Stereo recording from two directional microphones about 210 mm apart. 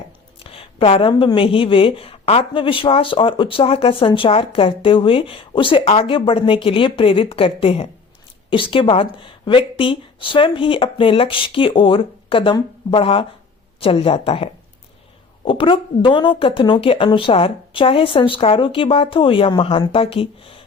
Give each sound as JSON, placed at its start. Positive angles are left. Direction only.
{"t": 0.4, "sound": "a woman's voice", "side_deg": 25}